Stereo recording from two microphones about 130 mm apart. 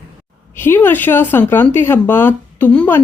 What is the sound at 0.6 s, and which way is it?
Speech, 15° left (ahead or behind).